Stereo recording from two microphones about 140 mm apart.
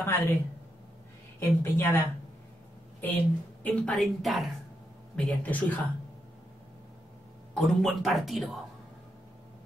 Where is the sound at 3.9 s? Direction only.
Centre (ahead or behind).